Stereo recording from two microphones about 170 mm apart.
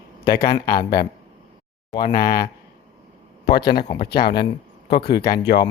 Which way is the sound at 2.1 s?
55° left (ahead or behind).